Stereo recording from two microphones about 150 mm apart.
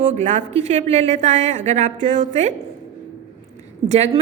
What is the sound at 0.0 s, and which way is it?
A woman's voice, 55° right (ahead or behind).